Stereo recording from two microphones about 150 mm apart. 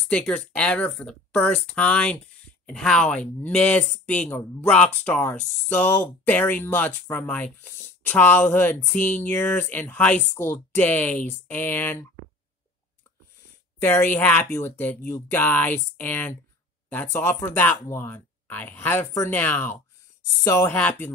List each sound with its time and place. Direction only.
0.1 s speech: 10° left (ahead or behind)
13.7 s speech: 15° left (ahead or behind)